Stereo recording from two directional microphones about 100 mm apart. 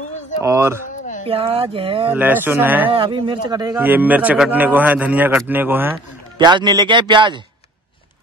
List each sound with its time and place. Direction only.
0.4 s speech: 25° right (ahead or behind)
1.2 s speech: 75° right (ahead or behind)
2.0 s a man's voice: 20° right (ahead or behind)
2.9 s speech: 60° right (ahead or behind)
3.7 s a man's voice: 20° right (ahead or behind)
6.3 s speech: 50° right (ahead or behind)